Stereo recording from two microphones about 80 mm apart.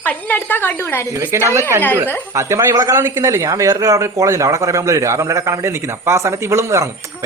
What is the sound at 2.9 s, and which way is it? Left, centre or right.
Speech, right.